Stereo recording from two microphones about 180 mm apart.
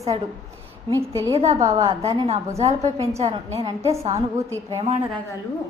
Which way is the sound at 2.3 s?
35° right (ahead or behind).